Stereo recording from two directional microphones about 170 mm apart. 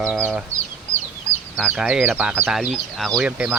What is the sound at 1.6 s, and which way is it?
Speech, 5° right (ahead or behind).